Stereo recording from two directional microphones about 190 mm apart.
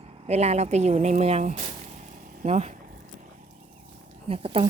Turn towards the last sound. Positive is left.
turn(degrees=-30)  # may be behind; listen again after turning